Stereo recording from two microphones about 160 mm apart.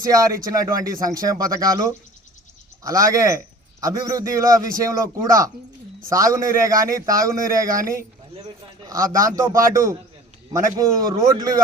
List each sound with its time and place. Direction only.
0.0 s a man's voice: 20° right (ahead or behind)
8.9 s speech: 20° right (ahead or behind)